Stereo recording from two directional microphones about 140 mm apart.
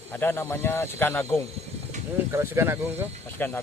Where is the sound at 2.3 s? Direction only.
15° right (ahead or behind).